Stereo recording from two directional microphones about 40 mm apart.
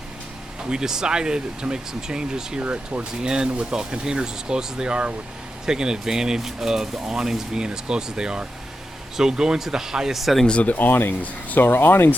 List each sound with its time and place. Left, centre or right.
0.7 s speech: centre
2.6 s speech: right
3.2 s speech: right; by 10.4 s centre
10.4 s speech: left
10.7 s speech: left